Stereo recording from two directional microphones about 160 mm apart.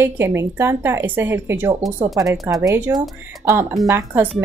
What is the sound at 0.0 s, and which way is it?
Speech, 15° right (ahead or behind).